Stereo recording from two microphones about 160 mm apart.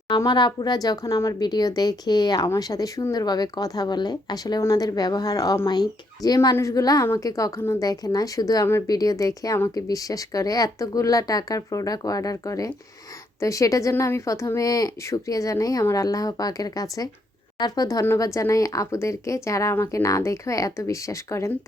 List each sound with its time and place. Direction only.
0.2 s speech: 30° left (ahead or behind)